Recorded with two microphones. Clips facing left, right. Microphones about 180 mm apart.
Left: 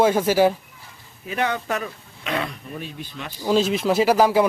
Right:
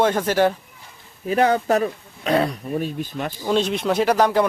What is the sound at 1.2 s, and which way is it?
Speech, 40° right (ahead or behind).